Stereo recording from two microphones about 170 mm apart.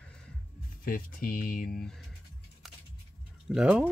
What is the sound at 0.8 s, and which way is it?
Speech, 55° left (ahead or behind).